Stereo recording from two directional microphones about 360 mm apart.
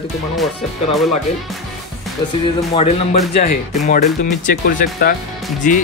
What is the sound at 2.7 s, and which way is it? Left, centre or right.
Speech, centre.